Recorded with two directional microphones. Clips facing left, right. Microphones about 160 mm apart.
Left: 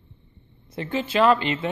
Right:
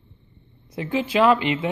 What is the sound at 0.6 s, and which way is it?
Speech, 10° right (ahead or behind).